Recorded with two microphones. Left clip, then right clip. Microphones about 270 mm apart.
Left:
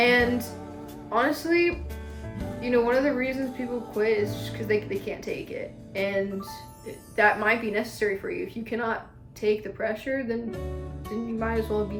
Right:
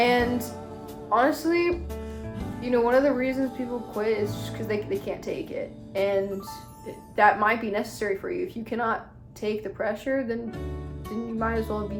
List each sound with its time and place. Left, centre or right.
0.0 s music: centre
1.1 s a woman's voice: centre
11.3 s a woman's voice: centre